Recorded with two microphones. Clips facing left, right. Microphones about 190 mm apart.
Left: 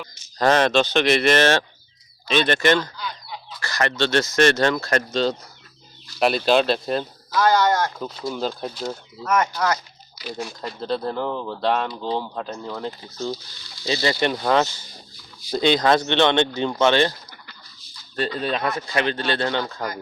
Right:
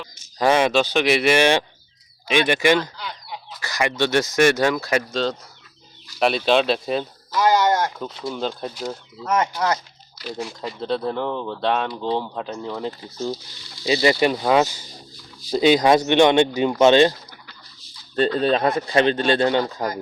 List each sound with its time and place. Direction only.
0.3 s speech: 10° right (ahead or behind)
7.3 s speech: 20° right (ahead or behind)
7.9 s speech: centre (ahead or behind)
9.2 s speech: 25° right (ahead or behind)
10.6 s speech: centre (ahead or behind); by 17.1 s 15° right (ahead or behind)
18.3 s speech: 30° right (ahead or behind)
19.0 s speech: 20° right (ahead or behind)